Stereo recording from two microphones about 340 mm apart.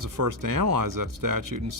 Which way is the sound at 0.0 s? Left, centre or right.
Right.